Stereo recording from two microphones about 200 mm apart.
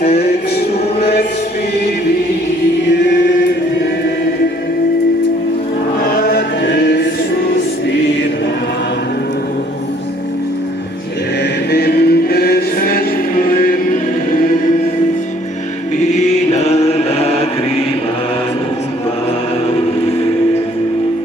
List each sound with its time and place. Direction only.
0.0 s music: 30° left (ahead or behind)
6.2 s chant: 50° left (ahead or behind)
11.7 s choir: 55° left (ahead or behind)
16.5 s music: 30° left (ahead or behind)